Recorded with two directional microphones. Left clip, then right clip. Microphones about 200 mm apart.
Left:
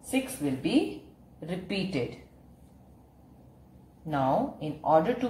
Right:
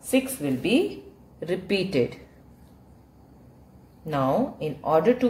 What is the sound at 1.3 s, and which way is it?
Speech, 50° right (ahead or behind).